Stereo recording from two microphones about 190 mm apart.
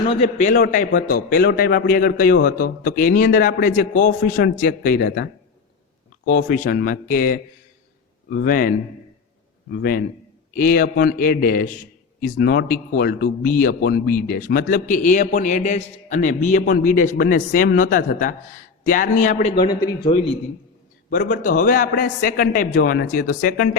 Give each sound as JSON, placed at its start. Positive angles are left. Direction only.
{"t": 0.1, "sound": "a man's voice", "side_deg": 35}
{"t": 0.5, "sound": "a man's voice", "side_deg": 45}
{"t": 6.3, "sound": "a man's voice", "side_deg": 50}
{"t": 9.6, "sound": "a man's voice", "side_deg": 55}
{"t": 12.4, "sound": "a man's voice", "side_deg": 55}
{"t": 21.1, "sound": "a man's voice", "side_deg": 55}